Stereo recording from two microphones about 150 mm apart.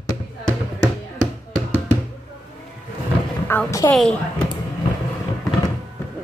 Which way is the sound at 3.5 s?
15° left (ahead or behind).